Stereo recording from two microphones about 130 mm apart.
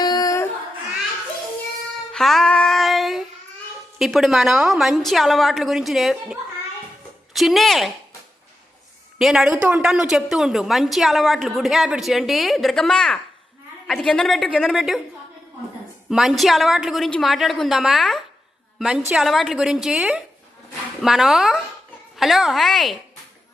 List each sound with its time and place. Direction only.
0.0 s child singing: 30° left (ahead or behind)
2.1 s music: 5° left (ahead or behind)
3.9 s a woman's voice: centre (ahead or behind)
7.3 s a woman's voice: centre (ahead or behind)
9.1 s a woman's voice: 5° right (ahead or behind)
16.0 s a woman's voice: 5° right (ahead or behind)